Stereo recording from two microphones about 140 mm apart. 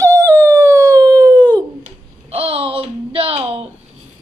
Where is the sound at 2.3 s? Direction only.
40° right (ahead or behind).